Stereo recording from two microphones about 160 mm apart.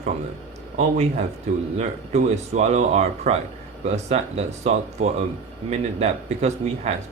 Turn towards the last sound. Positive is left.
turn(degrees=-45)  # may be behind; listen again after turning